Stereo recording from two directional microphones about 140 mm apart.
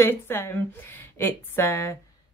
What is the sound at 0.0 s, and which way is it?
Speech, 15° left (ahead or behind).